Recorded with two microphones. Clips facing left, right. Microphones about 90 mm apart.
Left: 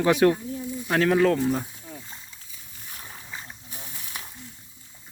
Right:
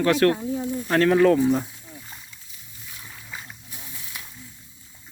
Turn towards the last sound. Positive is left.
turn(degrees=40)  # may be behind; listen again after turning